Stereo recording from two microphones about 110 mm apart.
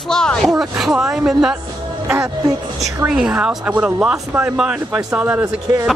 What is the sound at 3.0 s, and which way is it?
Speech, 10° right (ahead or behind).